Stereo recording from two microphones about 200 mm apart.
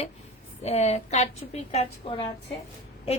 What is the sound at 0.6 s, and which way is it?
A woman's voice, 30° left (ahead or behind).